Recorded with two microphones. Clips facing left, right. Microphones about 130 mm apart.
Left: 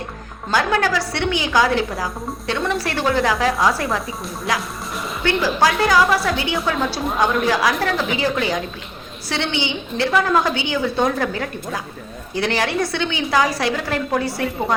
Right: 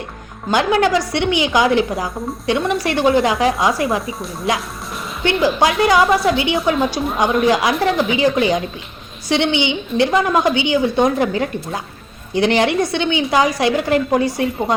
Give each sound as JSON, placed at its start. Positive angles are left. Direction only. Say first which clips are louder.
{"t": 0.5, "sound": "a woman's voice", "louder": "right 4 dB", "side_deg": -20}
{"t": 5.2, "sound": "a woman's voice", "louder": "right 3 dB", "side_deg": -20}